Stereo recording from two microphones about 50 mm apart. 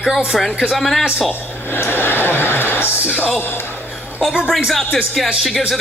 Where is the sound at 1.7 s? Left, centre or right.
Left.